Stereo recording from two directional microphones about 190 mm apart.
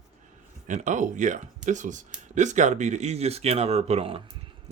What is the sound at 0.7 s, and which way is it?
Speech, 40° right (ahead or behind).